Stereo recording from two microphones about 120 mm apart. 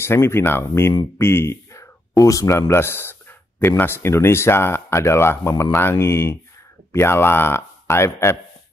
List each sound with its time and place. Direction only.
0.0 s speech: 20° left (ahead or behind)